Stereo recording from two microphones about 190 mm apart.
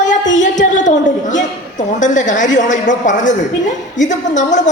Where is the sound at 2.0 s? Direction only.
40° left (ahead or behind).